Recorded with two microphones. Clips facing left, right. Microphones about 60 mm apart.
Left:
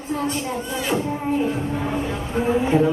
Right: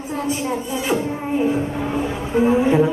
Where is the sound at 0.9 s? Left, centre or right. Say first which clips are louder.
Right 2 dB; centre.